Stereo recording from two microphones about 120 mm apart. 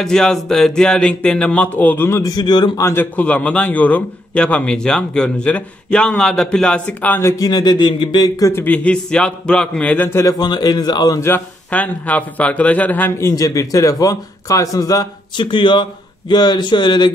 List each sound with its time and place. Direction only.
0.0 s a man's voice: 5° left (ahead or behind); by 2.8 s 40° left (ahead or behind)
2.8 s a man's voice: 20° left (ahead or behind)
8.6 s a man's voice: 10° left (ahead or behind)
10.4 s a man's voice: 35° left (ahead or behind); by 13.3 s 15° left (ahead or behind)
13.3 s a man's voice: 30° left (ahead or behind)